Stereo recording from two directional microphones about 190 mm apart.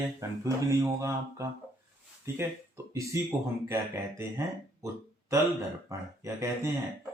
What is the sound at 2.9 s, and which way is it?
Speech, 15° right (ahead or behind).